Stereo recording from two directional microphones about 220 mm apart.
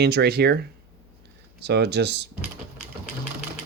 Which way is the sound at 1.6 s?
50° right (ahead or behind).